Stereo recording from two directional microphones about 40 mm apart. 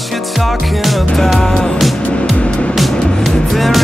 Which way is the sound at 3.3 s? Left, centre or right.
Centre.